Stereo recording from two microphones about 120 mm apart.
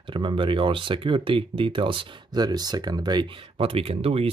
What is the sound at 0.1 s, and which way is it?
Speech, 45° right (ahead or behind).